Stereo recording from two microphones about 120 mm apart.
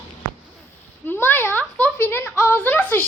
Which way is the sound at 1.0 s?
15° left (ahead or behind).